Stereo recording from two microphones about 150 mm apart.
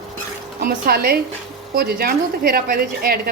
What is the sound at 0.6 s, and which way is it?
A woman's voice, 90° right.